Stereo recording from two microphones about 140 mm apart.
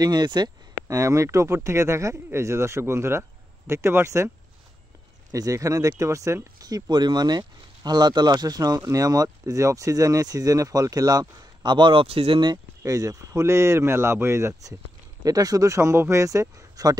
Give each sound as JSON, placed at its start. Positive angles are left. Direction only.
{"t": 0.0, "sound": "speech", "side_deg": -30}
{"t": 5.3, "sound": "speech", "side_deg": -25}